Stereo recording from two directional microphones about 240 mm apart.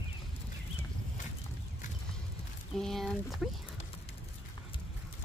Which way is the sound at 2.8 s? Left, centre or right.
Centre.